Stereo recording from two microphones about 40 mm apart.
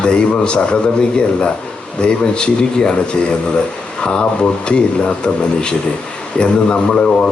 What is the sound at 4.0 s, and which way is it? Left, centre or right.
Speech, left.